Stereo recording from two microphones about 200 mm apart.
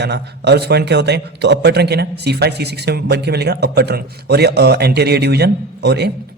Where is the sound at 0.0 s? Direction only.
55° right (ahead or behind).